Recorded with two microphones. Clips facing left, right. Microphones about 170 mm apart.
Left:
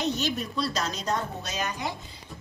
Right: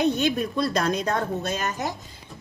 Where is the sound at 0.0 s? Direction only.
55° right (ahead or behind).